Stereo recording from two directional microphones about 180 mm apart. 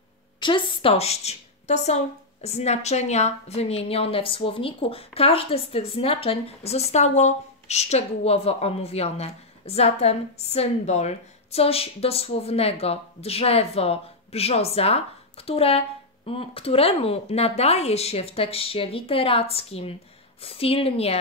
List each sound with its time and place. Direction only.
0.4 s a woman's voice: 25° left (ahead or behind)